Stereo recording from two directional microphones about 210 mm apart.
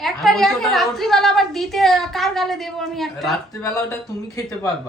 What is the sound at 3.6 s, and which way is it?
Speech, 15° left (ahead or behind).